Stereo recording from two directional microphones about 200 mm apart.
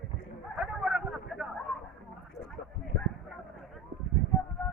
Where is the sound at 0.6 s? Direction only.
5° right (ahead or behind).